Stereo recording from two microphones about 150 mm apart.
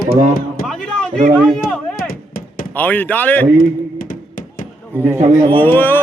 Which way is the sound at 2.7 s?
10° left (ahead or behind).